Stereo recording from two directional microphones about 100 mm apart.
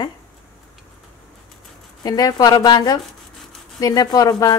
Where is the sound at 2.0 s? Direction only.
40° left (ahead or behind).